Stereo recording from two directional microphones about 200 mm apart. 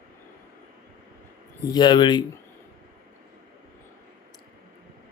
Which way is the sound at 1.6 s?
20° left (ahead or behind).